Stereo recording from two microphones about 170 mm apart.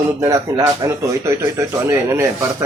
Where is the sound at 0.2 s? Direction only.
20° right (ahead or behind).